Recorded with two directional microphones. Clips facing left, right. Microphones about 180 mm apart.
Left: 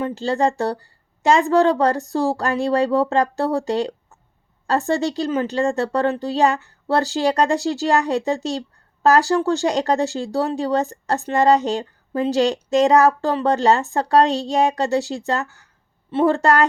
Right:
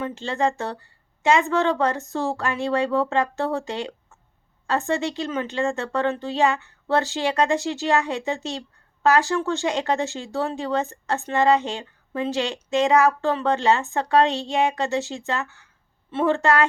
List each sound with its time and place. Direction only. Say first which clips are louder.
0.0 s speech: left 4 dB; 35° left (ahead or behind)